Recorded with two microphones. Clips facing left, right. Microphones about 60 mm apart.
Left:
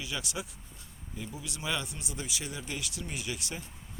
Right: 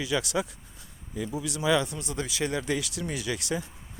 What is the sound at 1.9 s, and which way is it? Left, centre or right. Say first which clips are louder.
Speech: right 7 dB; right.